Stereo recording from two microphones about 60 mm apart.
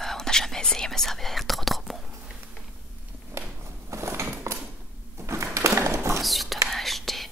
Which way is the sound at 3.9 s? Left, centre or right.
Right.